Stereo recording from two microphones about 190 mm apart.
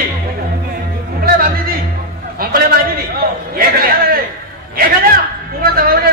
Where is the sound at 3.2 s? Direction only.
55° right (ahead or behind).